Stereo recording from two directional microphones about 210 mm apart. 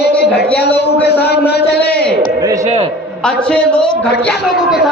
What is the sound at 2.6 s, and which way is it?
Speech, 30° right (ahead or behind).